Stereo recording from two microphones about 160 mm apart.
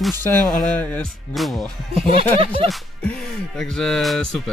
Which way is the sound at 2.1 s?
35° right (ahead or behind).